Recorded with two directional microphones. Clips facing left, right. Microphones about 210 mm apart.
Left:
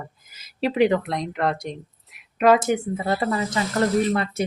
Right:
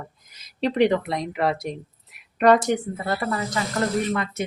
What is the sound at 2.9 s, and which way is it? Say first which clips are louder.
Speech: left 3 dB; 20° left (ahead or behind).